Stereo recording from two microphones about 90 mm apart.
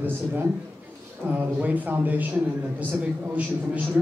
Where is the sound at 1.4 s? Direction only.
20° right (ahead or behind).